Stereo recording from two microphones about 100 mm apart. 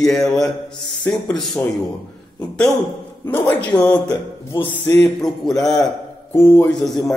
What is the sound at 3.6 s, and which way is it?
Speech, 15° left (ahead or behind).